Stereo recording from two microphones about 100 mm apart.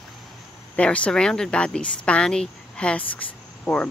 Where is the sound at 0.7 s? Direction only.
15° left (ahead or behind).